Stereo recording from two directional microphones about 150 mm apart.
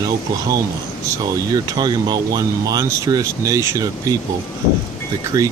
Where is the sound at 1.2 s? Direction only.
25° right (ahead or behind).